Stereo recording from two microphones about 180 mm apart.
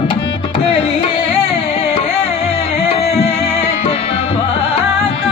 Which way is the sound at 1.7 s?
30° left (ahead or behind).